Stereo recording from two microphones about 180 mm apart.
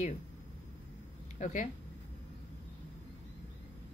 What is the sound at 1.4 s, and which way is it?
Speech, 45° left (ahead or behind).